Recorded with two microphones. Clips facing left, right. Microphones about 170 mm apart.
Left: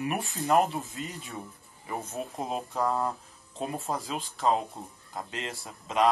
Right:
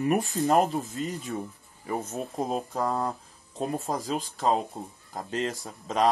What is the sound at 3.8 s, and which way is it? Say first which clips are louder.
Speech: right 3 dB; 40° right (ahead or behind).